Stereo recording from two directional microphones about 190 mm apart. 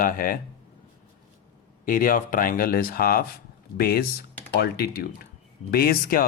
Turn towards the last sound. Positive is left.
turn(degrees=50)  # may be behind; listen again after turning